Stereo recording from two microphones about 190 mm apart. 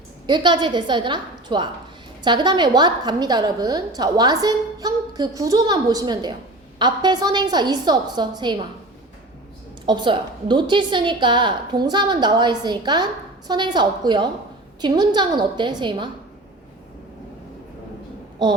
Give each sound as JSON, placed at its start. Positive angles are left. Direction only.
{"t": 0.3, "sound": "a woman's voice", "side_deg": -25}
{"t": 9.8, "sound": "a woman's voice", "side_deg": -25}